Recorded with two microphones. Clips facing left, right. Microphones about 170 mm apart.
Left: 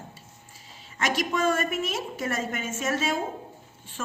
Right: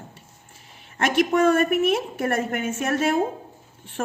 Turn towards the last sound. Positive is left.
turn(degrees=-55)  # may be behind; listen again after turning